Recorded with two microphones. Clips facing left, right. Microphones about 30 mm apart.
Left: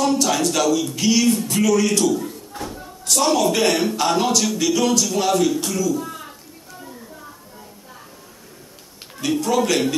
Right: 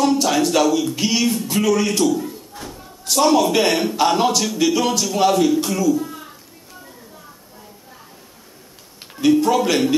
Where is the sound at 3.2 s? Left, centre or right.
Centre.